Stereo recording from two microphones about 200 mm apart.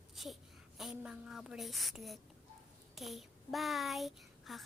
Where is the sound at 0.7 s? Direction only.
5° right (ahead or behind).